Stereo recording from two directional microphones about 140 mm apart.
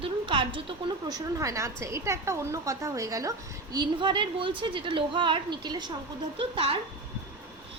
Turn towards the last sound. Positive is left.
turn(degrees=-40)  # may be behind; listen again after turning